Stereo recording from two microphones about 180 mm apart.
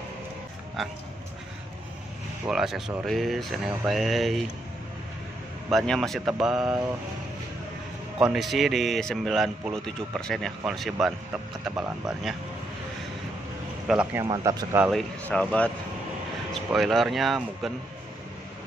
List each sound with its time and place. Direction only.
2.4 s speech: 5° right (ahead or behind)
5.7 s speech: centre (ahead or behind)
8.2 s speech: centre (ahead or behind)
13.8 s speech: 5° right (ahead or behind)
14.2 s speech: 20° right (ahead or behind)
14.8 s speech: centre (ahead or behind)
16.7 s speech: centre (ahead or behind)